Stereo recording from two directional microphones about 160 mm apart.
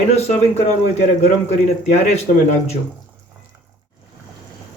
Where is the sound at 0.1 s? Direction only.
40° left (ahead or behind).